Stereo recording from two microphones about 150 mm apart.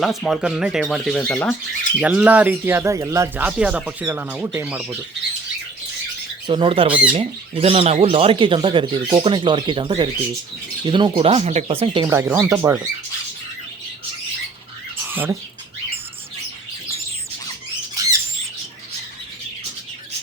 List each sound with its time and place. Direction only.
0.0 s speech: centre (ahead or behind)
2.0 s speech: 10° right (ahead or behind)
3.4 s speech: 10° right (ahead or behind)
6.5 s speech: 35° right (ahead or behind)
6.8 s speech: 10° right (ahead or behind)
7.1 s speech: 40° right (ahead or behind)
12.0 s speech: 20° right (ahead or behind)
15.0 s a sound: 15° right (ahead or behind)